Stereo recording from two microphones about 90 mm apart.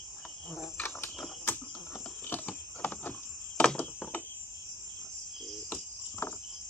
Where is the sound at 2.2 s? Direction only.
20° left (ahead or behind).